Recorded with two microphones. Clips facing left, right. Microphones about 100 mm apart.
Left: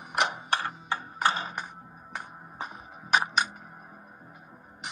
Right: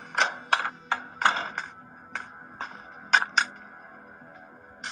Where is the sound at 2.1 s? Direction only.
10° left (ahead or behind).